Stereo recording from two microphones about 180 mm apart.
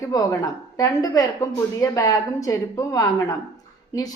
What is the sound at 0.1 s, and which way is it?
A woman's voice, 20° left (ahead or behind).